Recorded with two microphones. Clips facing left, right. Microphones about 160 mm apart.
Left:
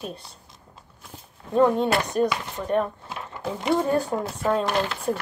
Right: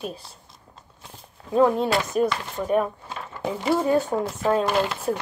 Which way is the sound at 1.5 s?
Centre (ahead or behind).